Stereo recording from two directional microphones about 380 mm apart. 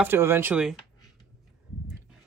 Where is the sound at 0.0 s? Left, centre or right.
Centre.